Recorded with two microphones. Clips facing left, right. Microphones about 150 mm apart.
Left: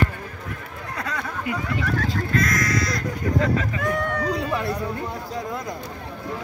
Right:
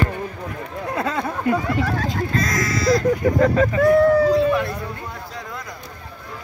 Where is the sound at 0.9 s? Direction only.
25° right (ahead or behind).